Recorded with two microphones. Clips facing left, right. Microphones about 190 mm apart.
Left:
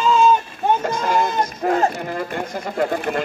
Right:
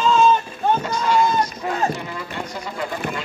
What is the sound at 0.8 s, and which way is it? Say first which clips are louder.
Speech: even; 50° left (ahead or behind).